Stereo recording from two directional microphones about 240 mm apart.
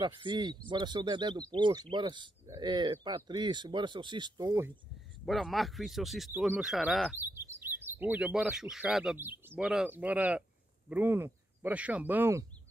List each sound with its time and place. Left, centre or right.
0.0 s speech: centre
5.2 s speech: centre